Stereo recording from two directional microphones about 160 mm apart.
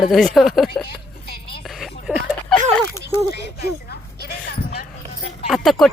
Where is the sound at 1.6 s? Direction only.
Centre (ahead or behind).